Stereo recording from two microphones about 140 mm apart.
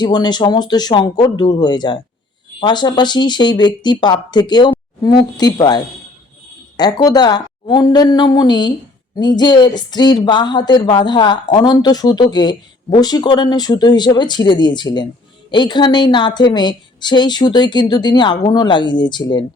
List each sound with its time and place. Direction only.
0.0 s a woman's voice: 30° left (ahead or behind)